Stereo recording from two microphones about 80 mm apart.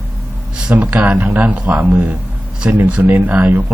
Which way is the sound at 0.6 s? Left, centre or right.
Centre.